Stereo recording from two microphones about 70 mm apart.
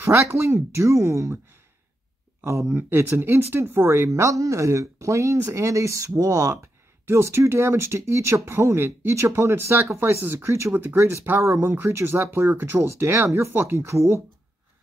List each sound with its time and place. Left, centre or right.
0.0 s speech: right
2.4 s speech: right